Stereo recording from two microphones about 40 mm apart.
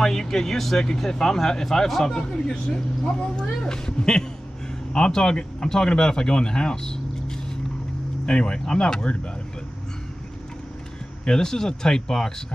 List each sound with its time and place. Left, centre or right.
0.0 s speech: centre
3.6 s speech: centre
11.2 s speech: centre